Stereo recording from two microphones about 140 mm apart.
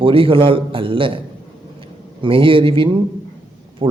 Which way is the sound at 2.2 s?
40° right (ahead or behind).